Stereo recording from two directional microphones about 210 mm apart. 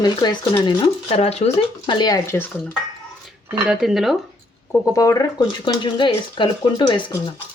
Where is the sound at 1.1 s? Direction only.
30° left (ahead or behind); by 2.5 s 10° left (ahead or behind).